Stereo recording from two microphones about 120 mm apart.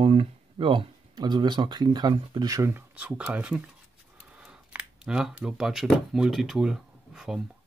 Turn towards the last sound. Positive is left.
turn(degrees=-5)  # may be behind; listen again after turning